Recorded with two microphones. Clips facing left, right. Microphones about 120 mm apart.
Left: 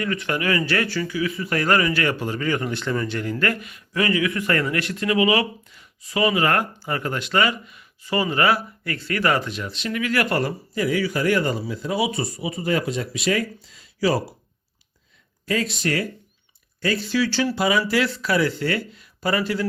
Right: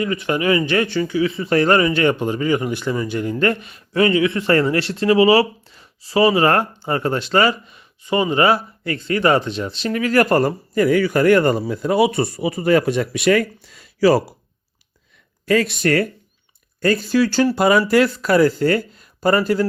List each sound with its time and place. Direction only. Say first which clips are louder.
0.0 s speech: right 5 dB; 20° right (ahead or behind); by 14.3 s 70° right (ahead or behind)
15.4 s speech: right 7 dB; 65° right (ahead or behind); by 19.6 s 40° right (ahead or behind)